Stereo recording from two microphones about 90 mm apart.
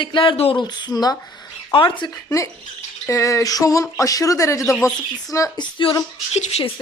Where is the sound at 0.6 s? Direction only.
50° left (ahead or behind).